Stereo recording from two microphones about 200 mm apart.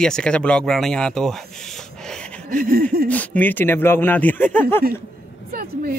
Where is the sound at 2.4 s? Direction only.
45° right (ahead or behind).